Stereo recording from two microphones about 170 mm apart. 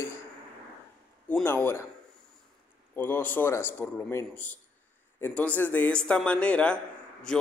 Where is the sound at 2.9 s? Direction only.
10° left (ahead or behind).